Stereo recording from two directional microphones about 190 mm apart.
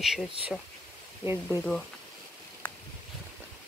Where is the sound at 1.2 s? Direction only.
10° right (ahead or behind).